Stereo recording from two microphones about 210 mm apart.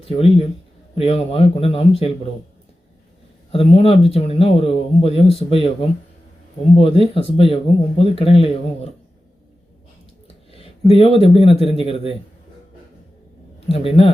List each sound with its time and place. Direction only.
0.0 s speech: 25° left (ahead or behind)
3.5 s speech: 25° left (ahead or behind)
7.0 s speech: 25° left (ahead or behind)
10.2 s a sound: 25° left (ahead or behind)
11.3 s speech: 25° left (ahead or behind)
13.7 s speech: 25° left (ahead or behind)